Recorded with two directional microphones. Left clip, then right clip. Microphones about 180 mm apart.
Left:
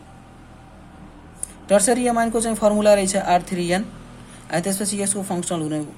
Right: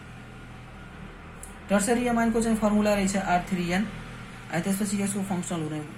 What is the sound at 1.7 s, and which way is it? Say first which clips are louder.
Speech: left 8 dB; 40° left (ahead or behind).